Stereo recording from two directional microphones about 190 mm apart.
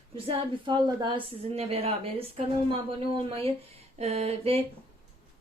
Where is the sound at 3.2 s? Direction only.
30° right (ahead or behind).